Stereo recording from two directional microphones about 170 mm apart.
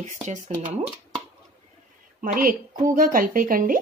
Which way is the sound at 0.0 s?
45° right (ahead or behind).